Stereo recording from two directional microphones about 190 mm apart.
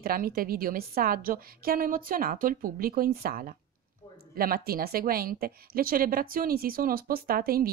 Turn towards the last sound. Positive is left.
turn(degrees=-50)  # may be behind; listen again after turning